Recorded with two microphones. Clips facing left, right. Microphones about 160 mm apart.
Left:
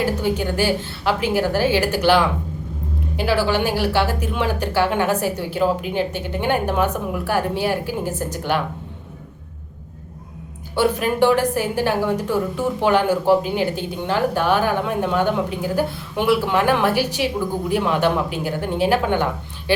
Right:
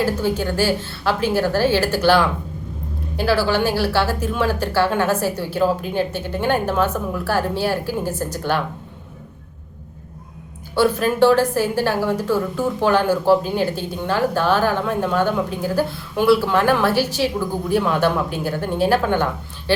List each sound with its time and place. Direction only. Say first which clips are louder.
0.0 s a woman's voice: right 1 dB; 15° left (ahead or behind)
10.8 s a woman's voice: right 2 dB; 15° left (ahead or behind)